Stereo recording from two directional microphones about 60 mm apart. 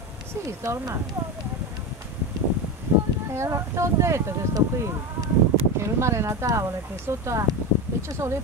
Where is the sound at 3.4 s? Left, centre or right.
Right.